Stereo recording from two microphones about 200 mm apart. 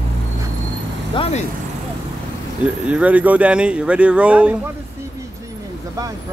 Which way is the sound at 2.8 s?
5° right (ahead or behind).